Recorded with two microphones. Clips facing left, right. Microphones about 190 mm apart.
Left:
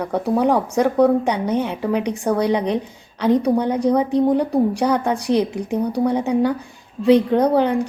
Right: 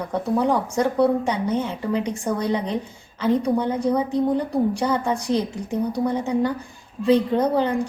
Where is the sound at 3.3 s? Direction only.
15° left (ahead or behind).